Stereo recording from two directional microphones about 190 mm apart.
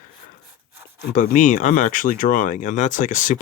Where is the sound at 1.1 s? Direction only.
40° left (ahead or behind).